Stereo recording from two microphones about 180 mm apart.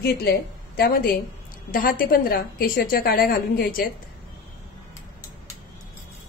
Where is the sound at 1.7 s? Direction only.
50° left (ahead or behind).